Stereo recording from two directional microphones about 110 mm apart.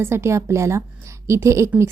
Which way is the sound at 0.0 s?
25° right (ahead or behind).